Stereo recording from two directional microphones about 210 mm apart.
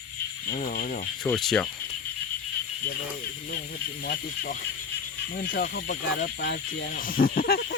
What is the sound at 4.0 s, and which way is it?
Speech, 45° left (ahead or behind).